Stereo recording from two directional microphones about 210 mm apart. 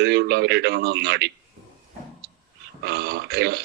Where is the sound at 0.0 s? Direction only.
50° right (ahead or behind).